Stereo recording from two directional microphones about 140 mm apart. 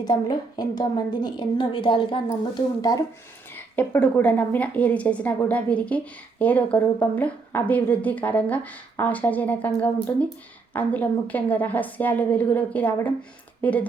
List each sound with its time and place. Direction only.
0.0 s a woman's voice: 30° left (ahead or behind)
3.8 s a woman's voice: 10° left (ahead or behind)